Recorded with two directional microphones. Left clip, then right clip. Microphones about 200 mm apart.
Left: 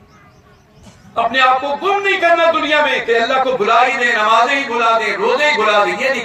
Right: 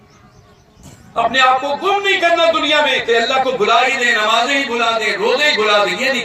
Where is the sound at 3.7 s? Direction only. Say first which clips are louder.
Left 1 dB; 50° right (ahead or behind).